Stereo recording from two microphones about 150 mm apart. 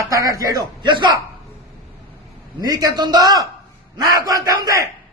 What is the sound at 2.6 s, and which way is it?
Speech, 25° right (ahead or behind).